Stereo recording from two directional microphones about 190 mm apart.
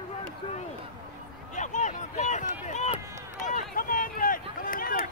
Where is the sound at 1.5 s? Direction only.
40° left (ahead or behind).